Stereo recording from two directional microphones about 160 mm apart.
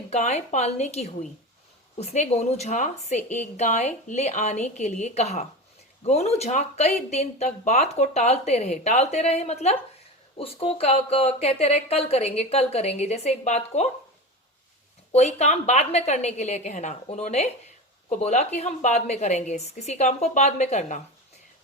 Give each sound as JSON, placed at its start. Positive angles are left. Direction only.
{"t": 0.1, "sound": "speech", "side_deg": 45}
{"t": 15.1, "sound": "speech", "side_deg": 45}